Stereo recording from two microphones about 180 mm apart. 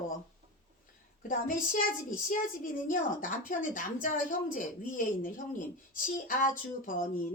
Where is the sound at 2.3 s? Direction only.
50° left (ahead or behind).